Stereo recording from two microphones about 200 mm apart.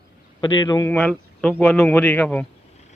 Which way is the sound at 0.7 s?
15° left (ahead or behind).